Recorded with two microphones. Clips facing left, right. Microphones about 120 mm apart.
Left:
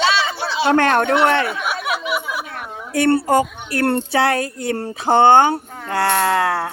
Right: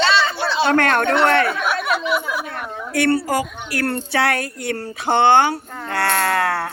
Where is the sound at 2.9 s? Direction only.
25° left (ahead or behind).